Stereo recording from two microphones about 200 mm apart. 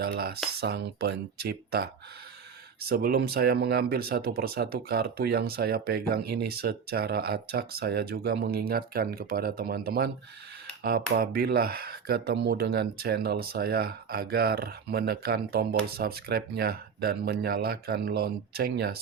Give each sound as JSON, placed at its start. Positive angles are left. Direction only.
{"t": 0.0, "sound": "speech", "side_deg": -50}
{"t": 11.1, "sound": "speech", "side_deg": -50}